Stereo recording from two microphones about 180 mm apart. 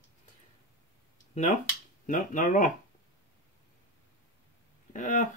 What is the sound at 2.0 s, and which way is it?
Speech, 45° left (ahead or behind).